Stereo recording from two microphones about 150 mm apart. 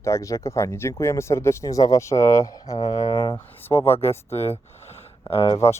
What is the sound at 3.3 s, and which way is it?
Speech, 15° left (ahead or behind).